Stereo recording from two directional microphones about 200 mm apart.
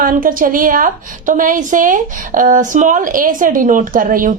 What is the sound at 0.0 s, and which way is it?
A woman's voice, 45° right (ahead or behind).